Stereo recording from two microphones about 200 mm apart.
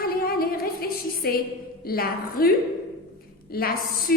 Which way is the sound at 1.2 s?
50° left (ahead or behind).